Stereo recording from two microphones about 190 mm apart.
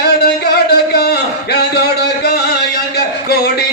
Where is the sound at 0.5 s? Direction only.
60° left (ahead or behind).